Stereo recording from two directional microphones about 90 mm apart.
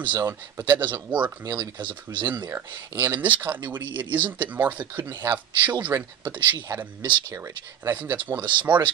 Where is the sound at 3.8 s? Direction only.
60° right (ahead or behind).